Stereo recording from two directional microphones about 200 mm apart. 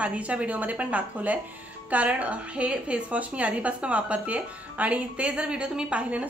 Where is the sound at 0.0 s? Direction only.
5° right (ahead or behind).